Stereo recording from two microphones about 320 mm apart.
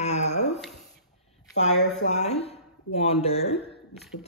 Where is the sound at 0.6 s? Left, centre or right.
Centre.